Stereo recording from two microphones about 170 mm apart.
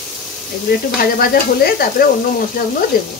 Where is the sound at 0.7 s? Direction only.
60° left (ahead or behind).